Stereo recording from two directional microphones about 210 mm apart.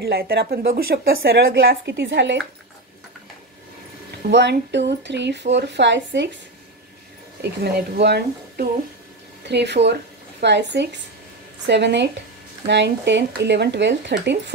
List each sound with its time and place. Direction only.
0.0 s a woman's voice: 45° right (ahead or behind)
4.3 s speech: 55° right (ahead or behind)
7.6 s a woman's voice: 50° right (ahead or behind)